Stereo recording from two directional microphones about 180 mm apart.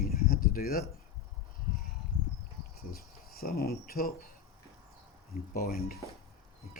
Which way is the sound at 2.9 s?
55° left (ahead or behind).